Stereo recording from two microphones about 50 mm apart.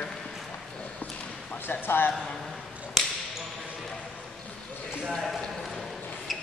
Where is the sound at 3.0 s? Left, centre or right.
Centre.